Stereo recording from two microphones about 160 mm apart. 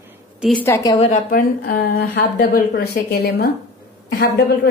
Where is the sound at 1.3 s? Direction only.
65° left (ahead or behind).